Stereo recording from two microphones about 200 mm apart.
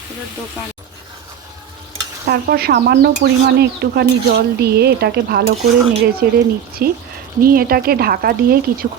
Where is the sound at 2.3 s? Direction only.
50° right (ahead or behind).